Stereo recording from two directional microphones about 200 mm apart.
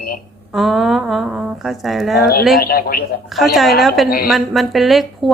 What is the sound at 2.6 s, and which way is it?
Speech, 50° left (ahead or behind).